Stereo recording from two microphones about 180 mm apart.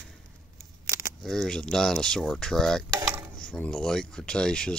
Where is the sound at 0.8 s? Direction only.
15° right (ahead or behind).